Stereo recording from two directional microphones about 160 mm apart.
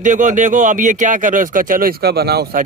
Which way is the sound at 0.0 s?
50° right (ahead or behind).